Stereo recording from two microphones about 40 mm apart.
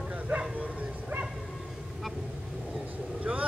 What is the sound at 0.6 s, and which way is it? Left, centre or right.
Bow-wow, right.